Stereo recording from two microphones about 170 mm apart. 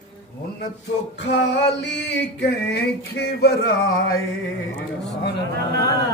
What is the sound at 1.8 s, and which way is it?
Male singing, 90° left.